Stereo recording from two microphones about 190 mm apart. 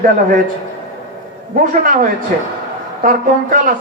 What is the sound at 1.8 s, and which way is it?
A man's voice, 45° right (ahead or behind).